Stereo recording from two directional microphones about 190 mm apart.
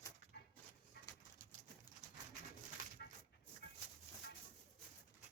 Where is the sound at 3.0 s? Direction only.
55° left (ahead or behind).